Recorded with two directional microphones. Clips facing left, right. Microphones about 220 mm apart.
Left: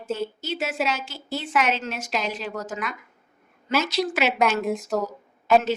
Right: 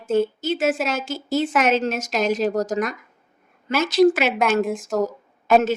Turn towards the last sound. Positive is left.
turn(degrees=-45)  # may be behind; listen again after turning